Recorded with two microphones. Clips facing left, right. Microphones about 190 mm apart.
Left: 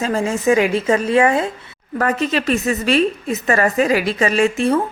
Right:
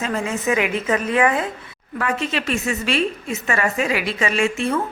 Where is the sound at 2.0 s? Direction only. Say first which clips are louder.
Left 5 dB; 40° left (ahead or behind).